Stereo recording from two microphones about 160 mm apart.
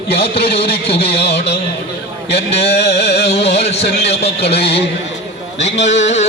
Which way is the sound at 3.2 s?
40° left (ahead or behind).